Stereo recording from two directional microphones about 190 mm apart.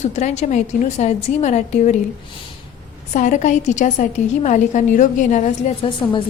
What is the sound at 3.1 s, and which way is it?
A woman's voice, 40° left (ahead or behind).